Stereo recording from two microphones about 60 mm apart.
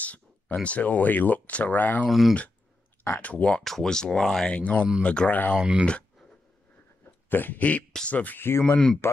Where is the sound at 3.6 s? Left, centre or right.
Centre.